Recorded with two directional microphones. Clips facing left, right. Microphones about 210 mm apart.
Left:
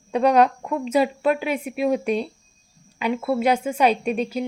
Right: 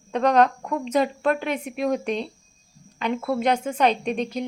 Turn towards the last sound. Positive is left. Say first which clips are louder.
# left 2 dB
turn(degrees=5)  # may be behind; listen again after turning